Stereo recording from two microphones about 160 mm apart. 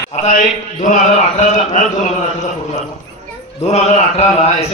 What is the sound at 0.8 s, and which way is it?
Speech, 50° left (ahead or behind).